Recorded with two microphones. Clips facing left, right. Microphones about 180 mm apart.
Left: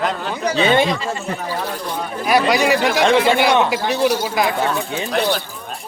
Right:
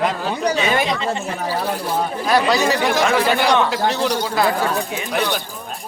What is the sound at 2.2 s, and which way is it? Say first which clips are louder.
Speech: left 2 dB; 10° left (ahead or behind).